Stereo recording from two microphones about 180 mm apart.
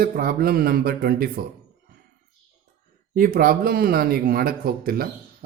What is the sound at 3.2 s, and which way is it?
Speech, 55° right (ahead or behind).